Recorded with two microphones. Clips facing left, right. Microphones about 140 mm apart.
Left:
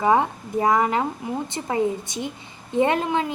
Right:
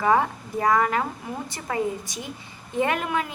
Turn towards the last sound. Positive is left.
turn(degrees=25)  # may be behind; listen again after turning